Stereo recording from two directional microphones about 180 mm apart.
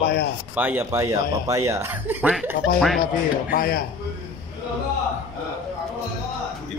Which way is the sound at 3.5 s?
55° left (ahead or behind).